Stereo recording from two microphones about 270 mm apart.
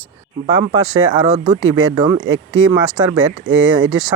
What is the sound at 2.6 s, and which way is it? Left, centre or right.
Speech, centre.